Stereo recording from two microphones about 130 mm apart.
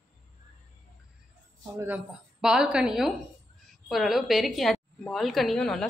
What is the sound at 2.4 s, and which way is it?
A woman's voice, 5° right (ahead or behind).